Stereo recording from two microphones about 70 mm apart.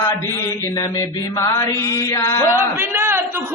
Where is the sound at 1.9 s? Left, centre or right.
Left.